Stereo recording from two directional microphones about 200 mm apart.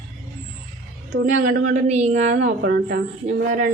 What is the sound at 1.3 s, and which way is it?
A woman's voice, 40° right (ahead or behind).